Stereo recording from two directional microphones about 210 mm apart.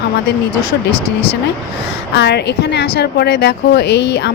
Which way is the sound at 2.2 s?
55° left (ahead or behind).